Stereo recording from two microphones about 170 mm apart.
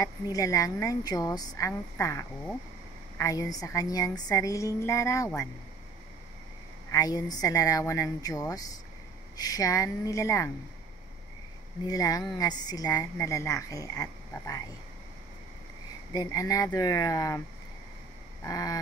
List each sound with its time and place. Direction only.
0.0 s a woman's voice: 20° left (ahead or behind)
6.9 s a woman's voice: 20° left (ahead or behind)
11.8 s a woman's voice: 20° left (ahead or behind)
16.1 s a woman's voice: 20° left (ahead or behind)
18.4 s a woman's voice: 20° left (ahead or behind)